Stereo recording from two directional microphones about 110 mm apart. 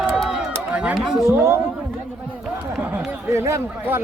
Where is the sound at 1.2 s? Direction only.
25° right (ahead or behind).